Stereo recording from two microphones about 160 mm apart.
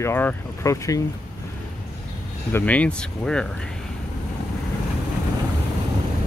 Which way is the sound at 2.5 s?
10° left (ahead or behind).